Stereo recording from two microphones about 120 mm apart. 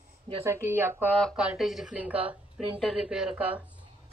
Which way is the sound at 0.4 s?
20° right (ahead or behind).